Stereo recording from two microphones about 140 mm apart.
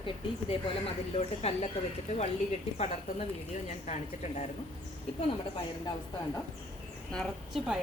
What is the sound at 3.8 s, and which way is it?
Speech, 55° left (ahead or behind).